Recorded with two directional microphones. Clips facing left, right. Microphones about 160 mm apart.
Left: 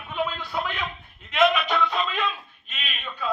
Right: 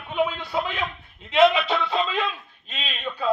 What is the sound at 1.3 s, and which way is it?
Music, 30° right (ahead or behind).